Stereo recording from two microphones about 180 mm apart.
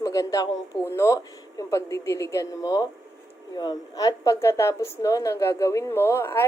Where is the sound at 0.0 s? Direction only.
20° left (ahead or behind).